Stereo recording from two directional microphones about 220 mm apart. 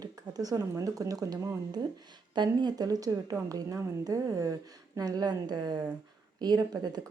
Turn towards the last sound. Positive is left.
turn(degrees=-20)  # may be behind; listen again after turning